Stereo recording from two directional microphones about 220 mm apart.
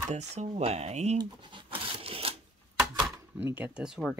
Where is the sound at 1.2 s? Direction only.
20° right (ahead or behind).